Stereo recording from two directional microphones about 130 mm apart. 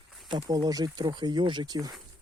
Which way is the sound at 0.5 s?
30° right (ahead or behind).